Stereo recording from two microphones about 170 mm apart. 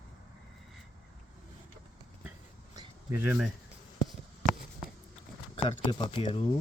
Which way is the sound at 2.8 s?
15° right (ahead or behind).